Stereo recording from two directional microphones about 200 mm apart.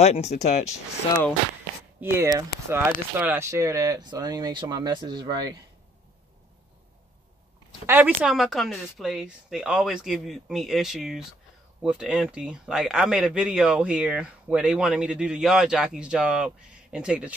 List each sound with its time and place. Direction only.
0.0 s speech: 35° left (ahead or behind)
2.3 s speech: 10° right (ahead or behind)
7.8 s speech: 10° right (ahead or behind)